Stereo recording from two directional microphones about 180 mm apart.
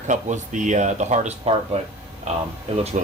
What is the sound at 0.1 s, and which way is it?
Speech, 45° right (ahead or behind).